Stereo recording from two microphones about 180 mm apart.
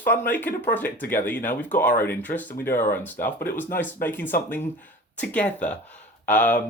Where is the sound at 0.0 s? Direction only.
10° left (ahead or behind).